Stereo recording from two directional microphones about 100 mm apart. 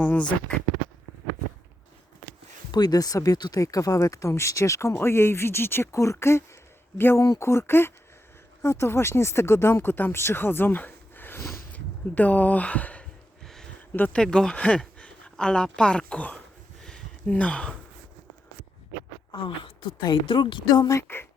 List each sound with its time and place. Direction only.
0.0 s speech: 10° left (ahead or behind)
2.7 s speech: 40° left (ahead or behind); by 11.6 s 25° left (ahead or behind)
11.7 s gasp: 15° left (ahead or behind)
13.9 s speech: 15° left (ahead or behind)
14.2 s speech: 5° left (ahead or behind)
16.8 s a sound: 10° left (ahead or behind)
19.3 s a woman's voice: 60° left (ahead or behind)
20.8 s speech: 30° left (ahead or behind)